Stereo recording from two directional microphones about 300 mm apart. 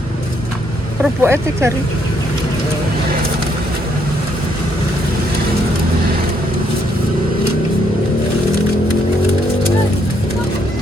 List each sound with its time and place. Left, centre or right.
1.0 s speech: centre